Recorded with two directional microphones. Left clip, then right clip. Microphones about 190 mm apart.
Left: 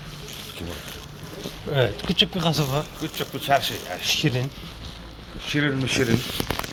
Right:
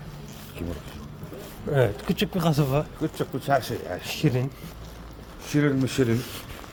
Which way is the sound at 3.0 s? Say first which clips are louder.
Even; 65° right (ahead or behind).